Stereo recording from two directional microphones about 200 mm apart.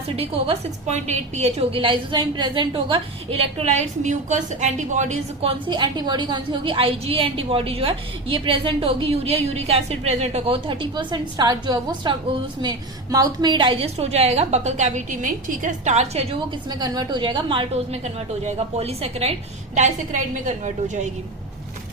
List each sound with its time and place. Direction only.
0.2 s a woman's voice: 30° right (ahead or behind)
16.6 s a woman's voice: 20° right (ahead or behind); by 21.1 s 40° right (ahead or behind)